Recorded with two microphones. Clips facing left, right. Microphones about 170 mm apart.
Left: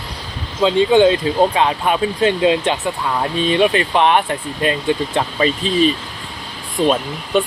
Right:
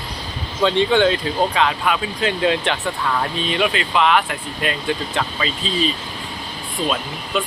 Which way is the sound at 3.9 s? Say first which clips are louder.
Left 3 dB; 45° left (ahead or behind).